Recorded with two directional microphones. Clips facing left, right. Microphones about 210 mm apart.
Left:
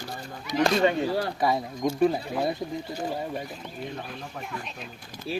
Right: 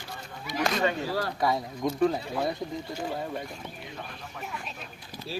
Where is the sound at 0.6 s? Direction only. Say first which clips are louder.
Left 5 dB; 25° left (ahead or behind).